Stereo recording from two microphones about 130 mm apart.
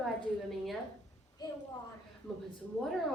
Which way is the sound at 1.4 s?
30° left (ahead or behind).